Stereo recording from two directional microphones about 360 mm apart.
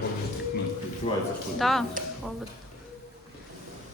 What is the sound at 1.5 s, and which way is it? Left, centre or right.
Speech, centre.